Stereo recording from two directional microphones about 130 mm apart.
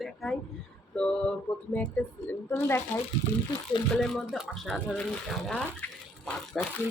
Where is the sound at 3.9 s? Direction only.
5° left (ahead or behind).